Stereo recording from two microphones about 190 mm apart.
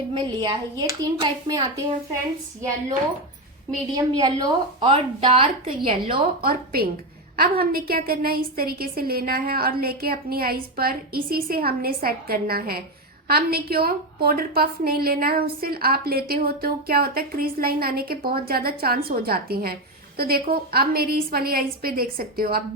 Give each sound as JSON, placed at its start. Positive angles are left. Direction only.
{"t": 0.1, "sound": "a woman's voice", "side_deg": -20}
{"t": 3.9, "sound": "a woman's voice", "side_deg": -20}
{"t": 6.4, "sound": "a woman's voice", "side_deg": -55}